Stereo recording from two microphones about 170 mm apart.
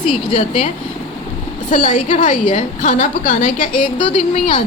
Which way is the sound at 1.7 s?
45° left (ahead or behind).